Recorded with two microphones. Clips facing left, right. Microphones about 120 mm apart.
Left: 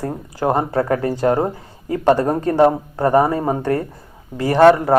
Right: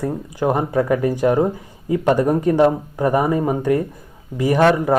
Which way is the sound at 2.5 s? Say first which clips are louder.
Left 5 dB; 35° left (ahead or behind).